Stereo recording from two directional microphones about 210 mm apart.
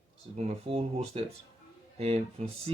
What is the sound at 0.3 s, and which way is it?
Speech, 30° right (ahead or behind).